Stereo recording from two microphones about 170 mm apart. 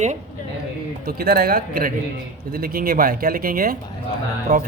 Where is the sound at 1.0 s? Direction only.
60° right (ahead or behind).